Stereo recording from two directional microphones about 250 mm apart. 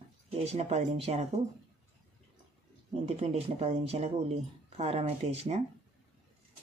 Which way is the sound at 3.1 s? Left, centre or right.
Right.